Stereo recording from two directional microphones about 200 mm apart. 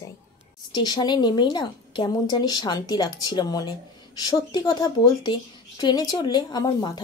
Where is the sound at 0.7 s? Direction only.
20° left (ahead or behind).